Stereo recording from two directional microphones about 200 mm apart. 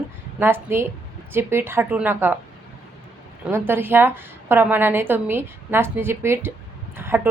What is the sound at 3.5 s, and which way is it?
A woman's voice, 10° right (ahead or behind).